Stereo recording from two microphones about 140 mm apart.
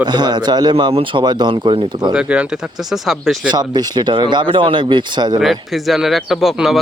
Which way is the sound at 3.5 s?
30° right (ahead or behind).